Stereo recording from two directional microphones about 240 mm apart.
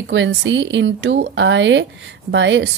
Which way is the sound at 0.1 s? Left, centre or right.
Right.